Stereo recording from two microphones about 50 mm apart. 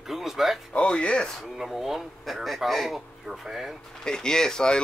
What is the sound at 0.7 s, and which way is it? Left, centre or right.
Speech, left.